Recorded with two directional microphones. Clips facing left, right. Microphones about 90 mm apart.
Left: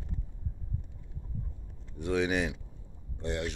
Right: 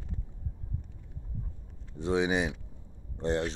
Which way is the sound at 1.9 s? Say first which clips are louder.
Right 1 dB; 25° right (ahead or behind).